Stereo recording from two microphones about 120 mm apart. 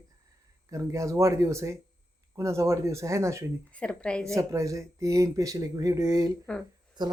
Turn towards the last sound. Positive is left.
turn(degrees=-35)  # may be behind; listen again after turning